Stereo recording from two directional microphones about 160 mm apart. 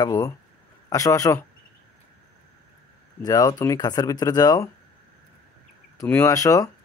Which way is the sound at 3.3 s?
20° left (ahead or behind).